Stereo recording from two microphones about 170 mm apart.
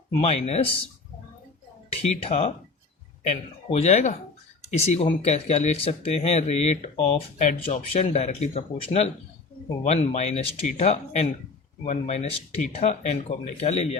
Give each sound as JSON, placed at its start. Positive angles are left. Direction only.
{"t": 0.2, "sound": "speech", "side_deg": 40}
{"t": 2.3, "sound": "speech", "side_deg": 45}